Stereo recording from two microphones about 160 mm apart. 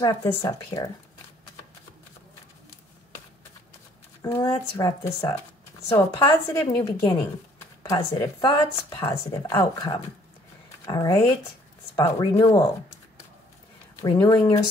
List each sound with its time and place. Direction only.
0.0 s a woman's voice: 20° left (ahead or behind)
4.2 s a woman's voice: 20° left (ahead or behind)
14.0 s a woman's voice: 25° left (ahead or behind)